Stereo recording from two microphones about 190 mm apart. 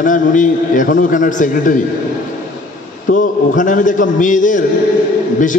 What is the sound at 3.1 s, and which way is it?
A man's voice, 40° left (ahead or behind).